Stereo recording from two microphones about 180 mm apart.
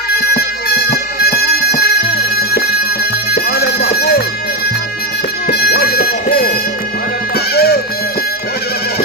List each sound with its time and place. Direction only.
0.9 s bagpipes: 55° left (ahead or behind)
3.3 s a sound: 55° left (ahead or behind)
5.5 s music: 60° left (ahead or behind)